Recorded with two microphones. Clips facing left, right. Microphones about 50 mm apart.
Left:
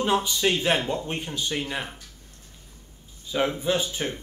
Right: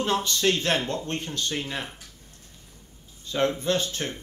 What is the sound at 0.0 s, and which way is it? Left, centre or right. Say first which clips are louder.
Speech: left 1 dB; centre.